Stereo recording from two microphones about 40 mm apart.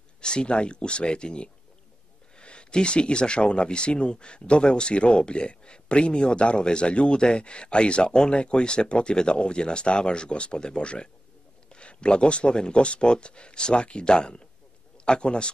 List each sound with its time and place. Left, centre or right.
0.2 s speech: left